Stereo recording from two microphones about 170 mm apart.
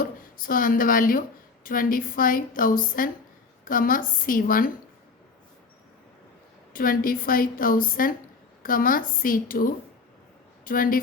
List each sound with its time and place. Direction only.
0.0 s a woman's voice: 55° left (ahead or behind)
6.7 s a woman's voice: 55° left (ahead or behind)